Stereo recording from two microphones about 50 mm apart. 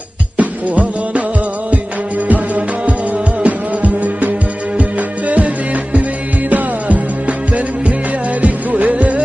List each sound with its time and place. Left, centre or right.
0.4 s music: right
2.2 s music: right
6.5 s music: right